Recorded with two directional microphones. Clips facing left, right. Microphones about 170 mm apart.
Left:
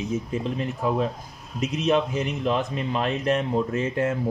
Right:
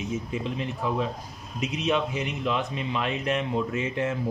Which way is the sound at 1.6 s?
40° left (ahead or behind).